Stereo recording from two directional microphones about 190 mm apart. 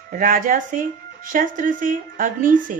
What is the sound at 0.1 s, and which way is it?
Speech, 45° right (ahead or behind).